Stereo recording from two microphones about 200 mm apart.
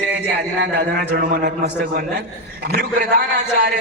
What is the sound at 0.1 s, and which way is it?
A man's voice, 55° right (ahead or behind).